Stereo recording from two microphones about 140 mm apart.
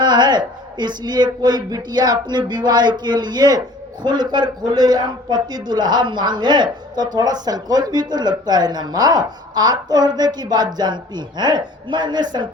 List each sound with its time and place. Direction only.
0.0 s a man's voice: 30° right (ahead or behind)